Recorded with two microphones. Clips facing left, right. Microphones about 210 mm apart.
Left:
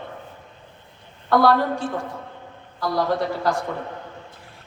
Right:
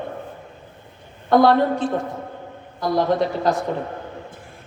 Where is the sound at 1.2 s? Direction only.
20° right (ahead or behind).